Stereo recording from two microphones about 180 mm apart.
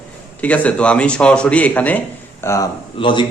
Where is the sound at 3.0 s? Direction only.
25° left (ahead or behind).